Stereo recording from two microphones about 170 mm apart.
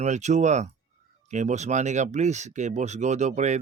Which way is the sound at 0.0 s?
40° right (ahead or behind).